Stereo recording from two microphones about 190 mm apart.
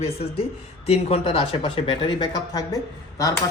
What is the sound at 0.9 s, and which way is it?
Speech, 30° left (ahead or behind).